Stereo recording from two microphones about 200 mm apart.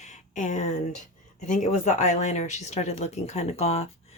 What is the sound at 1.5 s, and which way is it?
Speech, 40° left (ahead or behind).